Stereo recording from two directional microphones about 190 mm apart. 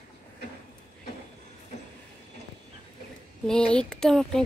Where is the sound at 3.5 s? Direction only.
5° left (ahead or behind).